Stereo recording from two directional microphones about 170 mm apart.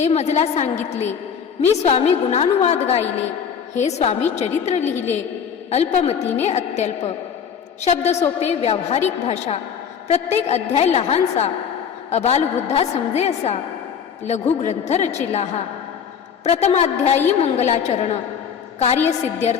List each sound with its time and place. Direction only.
0.0 s a woman's voice: 40° left (ahead or behind)
1.7 s a woman's voice: 40° left (ahead or behind)